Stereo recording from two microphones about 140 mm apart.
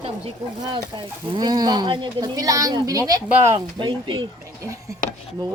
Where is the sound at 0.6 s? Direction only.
30° right (ahead or behind).